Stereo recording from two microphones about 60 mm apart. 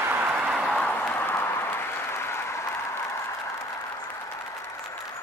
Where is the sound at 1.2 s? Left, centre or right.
Left.